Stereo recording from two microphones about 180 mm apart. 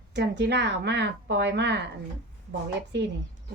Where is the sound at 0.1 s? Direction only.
75° right (ahead or behind).